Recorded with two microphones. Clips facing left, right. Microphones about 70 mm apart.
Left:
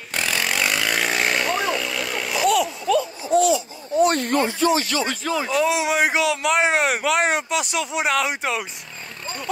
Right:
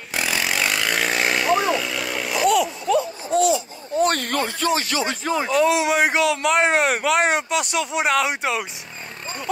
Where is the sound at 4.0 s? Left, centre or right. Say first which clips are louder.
Left 2 dB; right.